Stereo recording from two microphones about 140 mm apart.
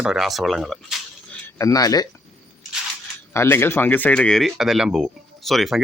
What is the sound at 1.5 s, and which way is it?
Speech, 25° left (ahead or behind).